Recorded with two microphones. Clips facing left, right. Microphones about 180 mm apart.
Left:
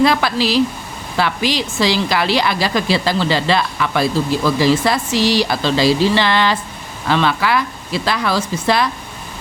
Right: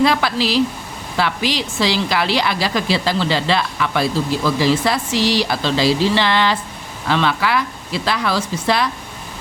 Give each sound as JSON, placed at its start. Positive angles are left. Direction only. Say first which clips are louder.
{"t": 0.0, "sound": "a woman's voice", "louder": "left 2 dB", "side_deg": 45}